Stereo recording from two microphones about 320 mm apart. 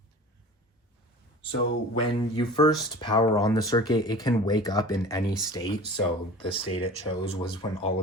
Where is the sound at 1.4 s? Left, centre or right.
Centre.